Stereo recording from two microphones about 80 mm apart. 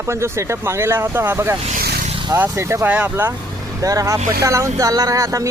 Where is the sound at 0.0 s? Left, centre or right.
Right.